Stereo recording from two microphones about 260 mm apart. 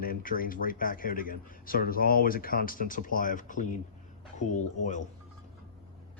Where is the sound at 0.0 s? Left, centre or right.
Left.